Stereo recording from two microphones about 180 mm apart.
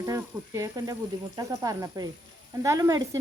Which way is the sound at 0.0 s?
15° right (ahead or behind).